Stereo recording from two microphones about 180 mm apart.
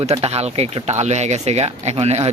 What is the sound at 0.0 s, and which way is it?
Speech, 35° right (ahead or behind).